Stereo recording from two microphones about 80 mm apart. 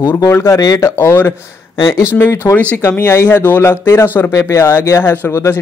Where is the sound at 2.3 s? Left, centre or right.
Left.